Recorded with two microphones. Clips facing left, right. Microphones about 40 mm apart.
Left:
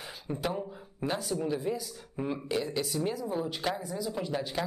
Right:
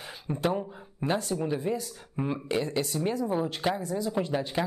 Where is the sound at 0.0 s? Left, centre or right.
Centre.